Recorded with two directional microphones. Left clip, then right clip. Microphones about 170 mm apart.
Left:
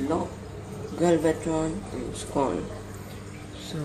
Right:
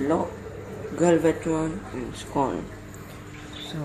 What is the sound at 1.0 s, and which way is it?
Speech, 45° right (ahead or behind).